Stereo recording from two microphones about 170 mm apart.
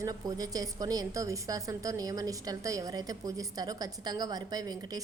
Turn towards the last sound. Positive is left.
turn(degrees=-20)  # may be behind; listen again after turning